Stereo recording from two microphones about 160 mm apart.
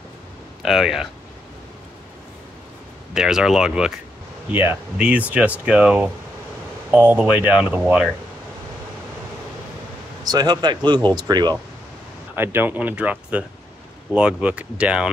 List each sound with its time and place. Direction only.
0.6 s speech: centre (ahead or behind)
3.2 s speech: 5° right (ahead or behind)
10.2 s speech: 25° right (ahead or behind)
12.4 s speech: 15° right (ahead or behind)